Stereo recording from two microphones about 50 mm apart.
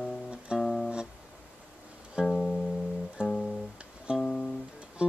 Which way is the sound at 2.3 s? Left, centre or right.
Centre.